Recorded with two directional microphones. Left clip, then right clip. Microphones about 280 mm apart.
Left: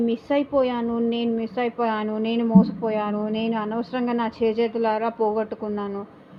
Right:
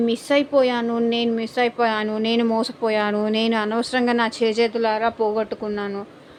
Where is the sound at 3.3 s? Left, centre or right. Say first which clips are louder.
Right 5 dB; centre.